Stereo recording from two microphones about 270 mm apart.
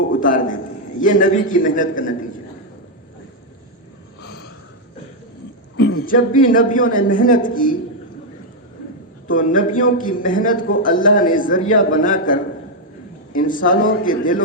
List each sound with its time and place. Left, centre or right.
0.1 s a man's voice: left
4.2 s a sound: left
5.7 s a man's voice: left
9.2 s a man's voice: left